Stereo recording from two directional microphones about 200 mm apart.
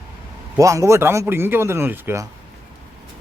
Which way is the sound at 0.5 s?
15° right (ahead or behind).